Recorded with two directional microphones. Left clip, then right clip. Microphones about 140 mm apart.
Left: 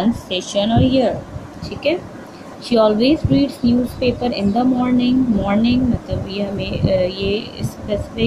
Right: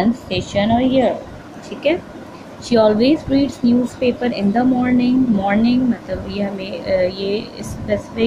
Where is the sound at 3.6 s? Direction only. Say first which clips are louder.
Right 1 dB; centre (ahead or behind).